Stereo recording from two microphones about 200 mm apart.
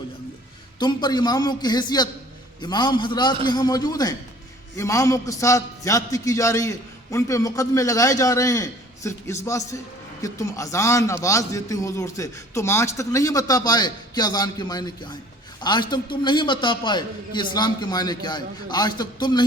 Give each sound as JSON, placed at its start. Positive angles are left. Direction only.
{"t": 0.8, "sound": "a man's voice", "side_deg": 20}